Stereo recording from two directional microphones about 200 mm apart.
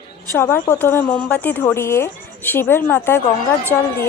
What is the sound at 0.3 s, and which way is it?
Speech, 10° left (ahead or behind).